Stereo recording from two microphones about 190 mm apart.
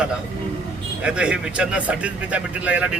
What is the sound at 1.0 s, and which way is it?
Speech, 5° right (ahead or behind).